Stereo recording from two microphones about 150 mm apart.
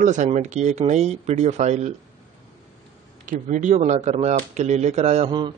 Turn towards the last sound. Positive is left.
turn(degrees=-30)  # may be behind; listen again after turning